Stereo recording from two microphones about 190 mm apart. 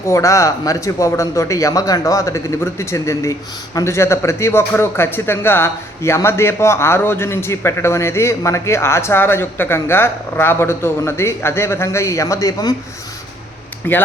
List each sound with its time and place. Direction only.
0.0 s a man's voice: 15° left (ahead or behind)
13.9 s a man's voice: 10° left (ahead or behind)